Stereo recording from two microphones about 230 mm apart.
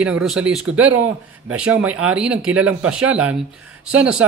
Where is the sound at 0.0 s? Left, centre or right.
Centre.